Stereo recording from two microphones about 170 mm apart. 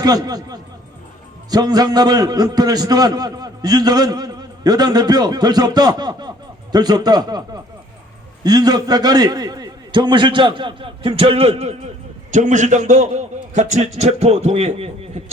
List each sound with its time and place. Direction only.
0.0 s a man's voice: 20° right (ahead or behind); by 15.2 s 40° right (ahead or behind)